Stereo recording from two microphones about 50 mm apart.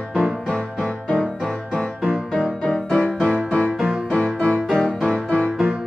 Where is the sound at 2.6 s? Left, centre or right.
Centre.